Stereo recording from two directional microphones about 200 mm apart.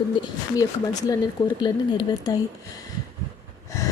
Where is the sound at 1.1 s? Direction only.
20° left (ahead or behind).